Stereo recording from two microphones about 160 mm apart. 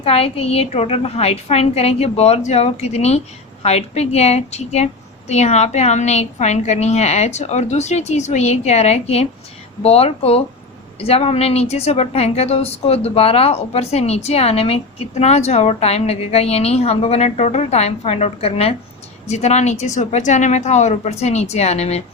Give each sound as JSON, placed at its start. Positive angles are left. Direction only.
{"t": 0.0, "sound": "a woman's voice", "side_deg": 40}